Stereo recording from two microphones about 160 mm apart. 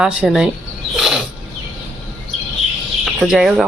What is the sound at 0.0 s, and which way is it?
Speech, 5° right (ahead or behind).